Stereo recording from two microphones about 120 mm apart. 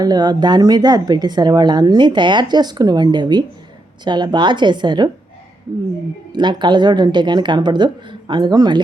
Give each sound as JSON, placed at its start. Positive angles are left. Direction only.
{"t": 0.0, "sound": "speech", "side_deg": -35}
{"t": 6.3, "sound": "speech", "side_deg": -40}